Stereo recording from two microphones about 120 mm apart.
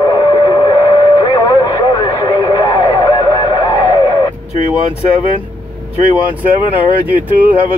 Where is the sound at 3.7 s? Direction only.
30° left (ahead or behind).